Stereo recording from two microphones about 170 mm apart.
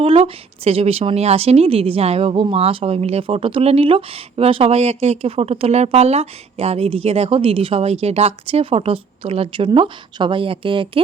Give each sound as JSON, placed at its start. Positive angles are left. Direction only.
{"t": 0.0, "sound": "a woman's voice", "side_deg": -35}